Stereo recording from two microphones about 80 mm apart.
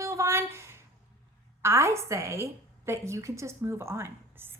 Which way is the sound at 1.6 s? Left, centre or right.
Right.